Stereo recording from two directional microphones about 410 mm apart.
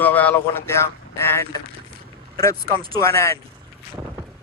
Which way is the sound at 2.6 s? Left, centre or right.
Right.